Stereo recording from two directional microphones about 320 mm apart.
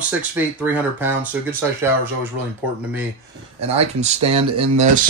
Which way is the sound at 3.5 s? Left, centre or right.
Centre.